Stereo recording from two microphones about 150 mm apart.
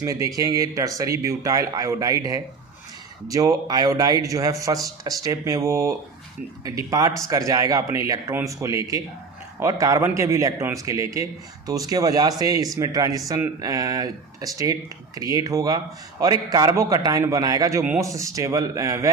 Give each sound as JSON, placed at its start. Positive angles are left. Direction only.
{"t": 0.0, "sound": "a man's voice", "side_deg": -20}